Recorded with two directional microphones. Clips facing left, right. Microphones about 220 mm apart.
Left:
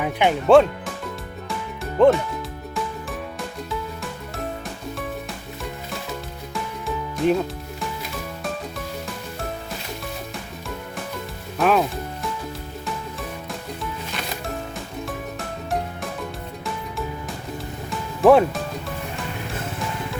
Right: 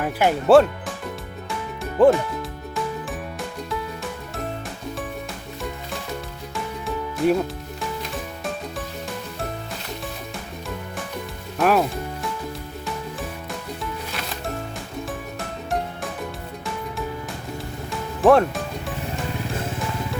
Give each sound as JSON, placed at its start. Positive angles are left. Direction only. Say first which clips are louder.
{"t": 0.0, "sound": "speech", "louder": "even", "side_deg": -5}
{"t": 1.5, "sound": "music", "louder": "even", "side_deg": 0}
{"t": 6.8, "sound": "music", "louder": "even", "side_deg": 0}
{"t": 11.5, "sound": "speech", "louder": "even", "side_deg": 0}
{"t": 18.2, "sound": "music", "louder": "left 1 dB", "side_deg": 5}